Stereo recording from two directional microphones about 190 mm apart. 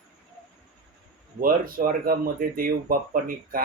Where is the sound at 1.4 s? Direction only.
50° right (ahead or behind).